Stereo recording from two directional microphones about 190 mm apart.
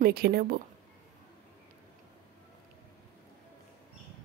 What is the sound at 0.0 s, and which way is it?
Speech, 55° right (ahead or behind).